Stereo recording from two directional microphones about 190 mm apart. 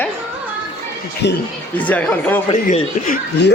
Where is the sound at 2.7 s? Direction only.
40° left (ahead or behind).